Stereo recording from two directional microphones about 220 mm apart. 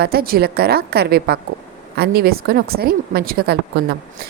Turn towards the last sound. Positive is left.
turn(degrees=-45)  # may be behind; listen again after turning